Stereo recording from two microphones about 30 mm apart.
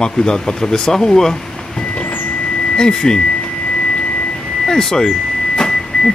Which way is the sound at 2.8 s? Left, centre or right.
Left.